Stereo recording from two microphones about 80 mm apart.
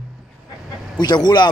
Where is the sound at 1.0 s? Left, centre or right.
Left.